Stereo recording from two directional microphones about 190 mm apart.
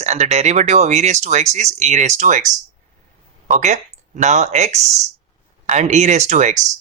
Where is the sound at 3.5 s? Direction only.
40° right (ahead or behind).